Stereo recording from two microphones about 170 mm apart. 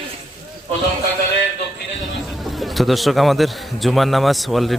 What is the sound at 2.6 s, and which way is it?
A man's voice, centre (ahead or behind).